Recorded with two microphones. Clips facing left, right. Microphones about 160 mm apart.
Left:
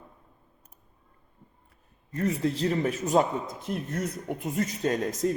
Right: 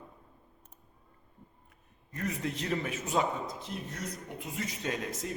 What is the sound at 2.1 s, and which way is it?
Speech, 30° left (ahead or behind).